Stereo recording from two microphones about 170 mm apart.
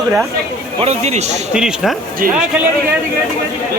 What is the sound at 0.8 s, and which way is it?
Speech, 40° right (ahead or behind).